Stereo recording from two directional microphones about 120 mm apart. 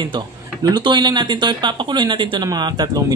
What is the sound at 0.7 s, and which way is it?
Speech, 35° right (ahead or behind).